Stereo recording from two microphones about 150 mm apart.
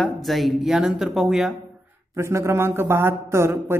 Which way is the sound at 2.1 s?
20° right (ahead or behind).